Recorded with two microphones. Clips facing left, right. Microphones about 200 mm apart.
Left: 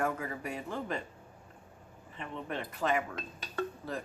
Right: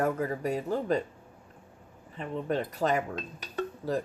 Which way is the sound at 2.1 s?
40° right (ahead or behind).